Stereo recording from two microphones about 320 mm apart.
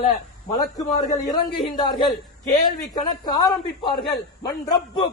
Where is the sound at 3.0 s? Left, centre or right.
Centre.